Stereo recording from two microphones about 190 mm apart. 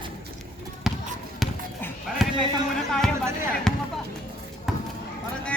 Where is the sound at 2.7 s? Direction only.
Centre (ahead or behind).